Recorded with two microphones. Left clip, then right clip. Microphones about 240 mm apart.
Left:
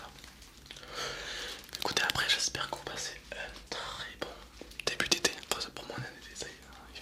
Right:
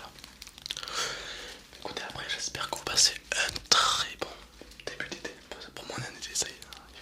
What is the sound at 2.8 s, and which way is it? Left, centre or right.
Whispering, right.